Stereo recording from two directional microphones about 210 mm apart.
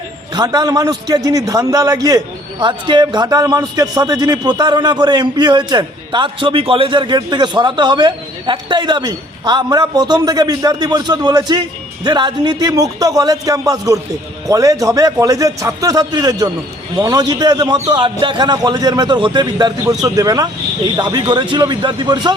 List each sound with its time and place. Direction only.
0.3 s a man's voice: 20° right (ahead or behind)